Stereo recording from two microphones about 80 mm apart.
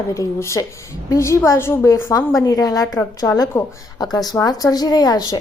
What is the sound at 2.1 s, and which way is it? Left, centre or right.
A woman's voice, left.